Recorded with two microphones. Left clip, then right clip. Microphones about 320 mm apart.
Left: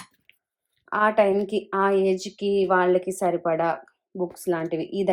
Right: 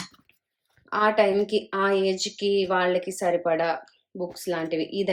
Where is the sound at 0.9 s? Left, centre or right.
Centre.